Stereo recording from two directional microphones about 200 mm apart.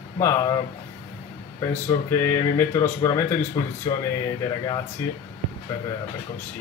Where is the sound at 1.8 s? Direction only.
15° left (ahead or behind).